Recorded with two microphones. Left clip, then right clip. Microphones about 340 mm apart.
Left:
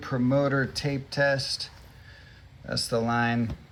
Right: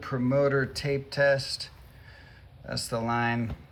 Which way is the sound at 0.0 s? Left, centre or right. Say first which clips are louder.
Even; centre.